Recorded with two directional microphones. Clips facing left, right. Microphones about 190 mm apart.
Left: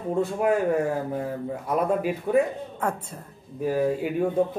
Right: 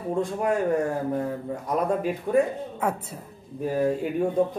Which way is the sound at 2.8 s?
10° right (ahead or behind).